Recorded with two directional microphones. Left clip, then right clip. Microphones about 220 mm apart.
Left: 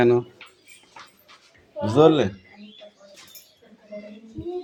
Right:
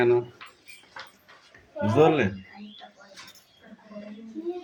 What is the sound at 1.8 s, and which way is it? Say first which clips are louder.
Speech: left 4 dB; 20° left (ahead or behind).